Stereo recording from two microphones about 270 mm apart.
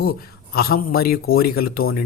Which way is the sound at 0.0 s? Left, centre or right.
Left.